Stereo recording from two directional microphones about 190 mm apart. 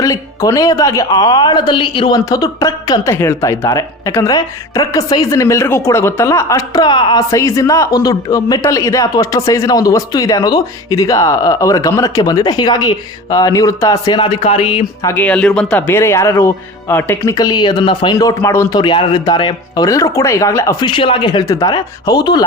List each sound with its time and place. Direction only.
0.0 s speech: 20° left (ahead or behind)
15.0 s speech: 10° left (ahead or behind)